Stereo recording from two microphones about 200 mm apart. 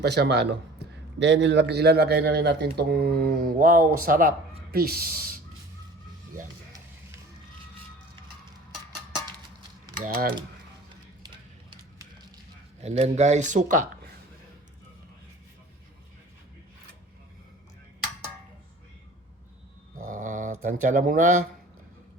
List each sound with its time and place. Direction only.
0.0 s a man's voice: 55° right (ahead or behind)
10.0 s speech: 45° right (ahead or behind)
12.8 s speech: 35° right (ahead or behind)
20.1 s dog: 40° right (ahead or behind)
20.8 s speech: 40° right (ahead or behind)